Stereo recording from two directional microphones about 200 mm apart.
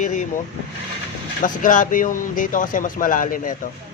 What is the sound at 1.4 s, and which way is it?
Speech, 40° left (ahead or behind).